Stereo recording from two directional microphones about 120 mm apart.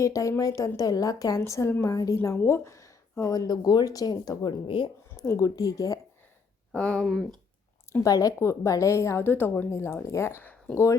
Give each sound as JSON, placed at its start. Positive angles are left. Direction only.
{"t": 0.0, "sound": "a woman's voice", "side_deg": 25}
{"t": 4.6, "sound": "speech", "side_deg": 45}
{"t": 5.1, "sound": "a woman's voice", "side_deg": 25}
{"t": 6.7, "sound": "speech", "side_deg": 10}
{"t": 8.0, "sound": "a woman's voice", "side_deg": 30}